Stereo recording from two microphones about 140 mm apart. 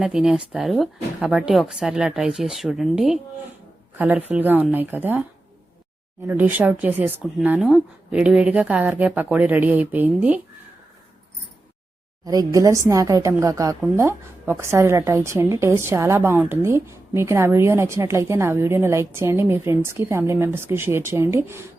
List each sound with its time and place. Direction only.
0.0 s speech: 5° right (ahead or behind)
6.2 s speech: 15° right (ahead or behind)
12.2 s a woman's voice: 25° right (ahead or behind)